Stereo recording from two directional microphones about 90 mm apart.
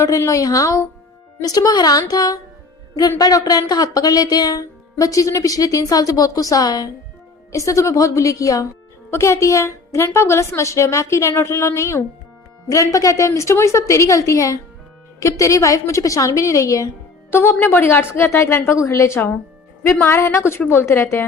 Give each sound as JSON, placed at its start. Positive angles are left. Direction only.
{"t": 0.0, "sound": "a woman's voice", "side_deg": 35}
{"t": 17.3, "sound": "a woman's voice", "side_deg": 25}
{"t": 18.8, "sound": "a woman's voice", "side_deg": 35}